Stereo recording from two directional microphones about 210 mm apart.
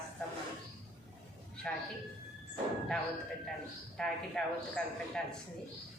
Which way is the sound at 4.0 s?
5° left (ahead or behind).